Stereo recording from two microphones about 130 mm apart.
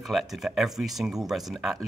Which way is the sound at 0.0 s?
Centre (ahead or behind).